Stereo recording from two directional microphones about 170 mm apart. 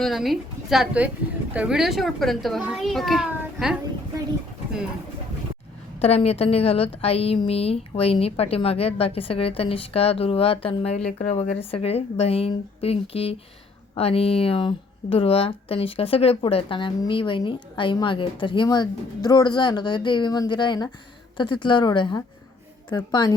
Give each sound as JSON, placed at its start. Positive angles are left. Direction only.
{"t": 0.0, "sound": "a child's voice", "side_deg": 0}
{"t": 6.0, "sound": "a woman's voice", "side_deg": 35}